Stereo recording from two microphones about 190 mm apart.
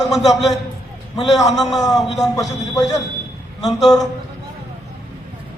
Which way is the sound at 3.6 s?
Centre (ahead or behind).